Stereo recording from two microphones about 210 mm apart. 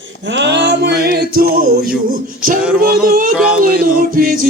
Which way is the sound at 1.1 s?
45° right (ahead or behind).